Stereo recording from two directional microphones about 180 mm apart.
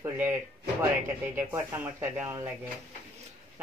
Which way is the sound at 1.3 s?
15° right (ahead or behind).